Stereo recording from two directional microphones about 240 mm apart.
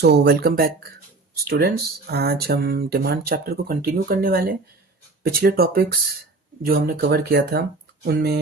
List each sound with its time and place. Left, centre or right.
0.0 s speech: right